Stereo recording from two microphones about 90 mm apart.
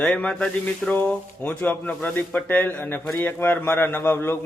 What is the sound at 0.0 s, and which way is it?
Speech, 15° left (ahead or behind).